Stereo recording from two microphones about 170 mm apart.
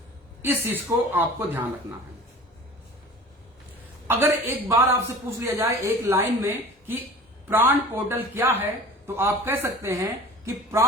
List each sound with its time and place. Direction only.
0.4 s a man's voice: 10° right (ahead or behind)
4.0 s a man's voice: 15° right (ahead or behind)